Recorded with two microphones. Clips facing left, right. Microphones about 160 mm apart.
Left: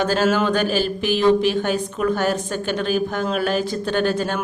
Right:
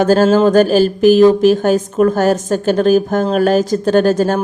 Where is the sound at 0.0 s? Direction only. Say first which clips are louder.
Right 8 dB; 45° right (ahead or behind).